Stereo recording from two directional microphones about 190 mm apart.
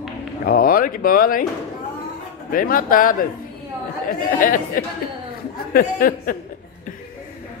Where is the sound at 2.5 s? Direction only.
50° left (ahead or behind).